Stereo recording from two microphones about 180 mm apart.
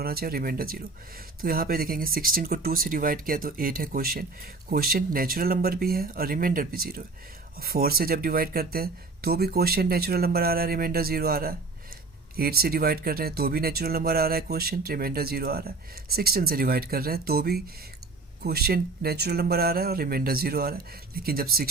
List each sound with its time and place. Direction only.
0.0 s speech: 55° right (ahead or behind)